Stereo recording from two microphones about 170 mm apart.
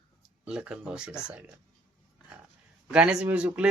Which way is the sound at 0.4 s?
5° right (ahead or behind).